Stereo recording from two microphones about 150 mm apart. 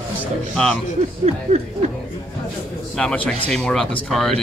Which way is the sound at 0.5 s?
5° left (ahead or behind).